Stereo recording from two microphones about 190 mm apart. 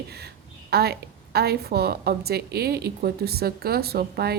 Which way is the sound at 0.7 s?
55° right (ahead or behind).